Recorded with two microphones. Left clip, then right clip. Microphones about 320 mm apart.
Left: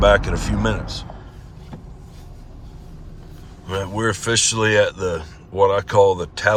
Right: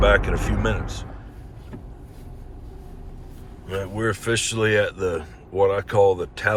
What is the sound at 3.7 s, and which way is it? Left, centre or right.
Speech, centre.